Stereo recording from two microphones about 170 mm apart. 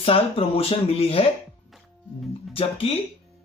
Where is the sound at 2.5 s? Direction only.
35° left (ahead or behind).